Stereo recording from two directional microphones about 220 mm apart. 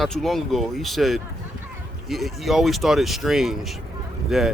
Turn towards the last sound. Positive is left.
turn(degrees=0)  # may be behind; listen again after turning